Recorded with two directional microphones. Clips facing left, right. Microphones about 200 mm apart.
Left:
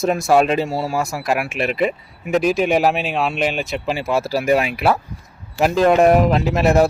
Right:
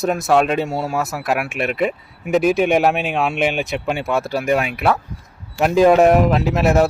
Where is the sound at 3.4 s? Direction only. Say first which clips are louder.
Right 1 dB; 55° right (ahead or behind).